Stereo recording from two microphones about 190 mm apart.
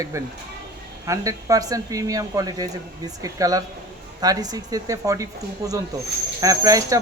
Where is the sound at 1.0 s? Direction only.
15° right (ahead or behind).